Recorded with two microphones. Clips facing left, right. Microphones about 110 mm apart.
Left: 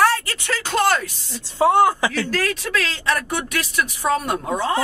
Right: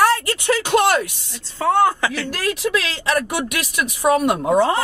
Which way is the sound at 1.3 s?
15° left (ahead or behind).